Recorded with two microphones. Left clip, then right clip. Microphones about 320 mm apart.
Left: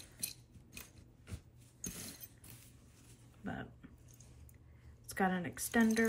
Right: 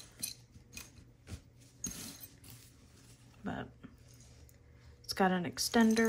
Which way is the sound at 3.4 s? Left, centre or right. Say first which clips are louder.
Right 3 dB; centre.